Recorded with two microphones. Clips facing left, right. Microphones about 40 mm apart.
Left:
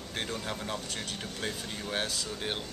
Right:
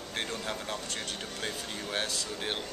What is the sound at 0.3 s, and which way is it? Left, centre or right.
Speech, centre.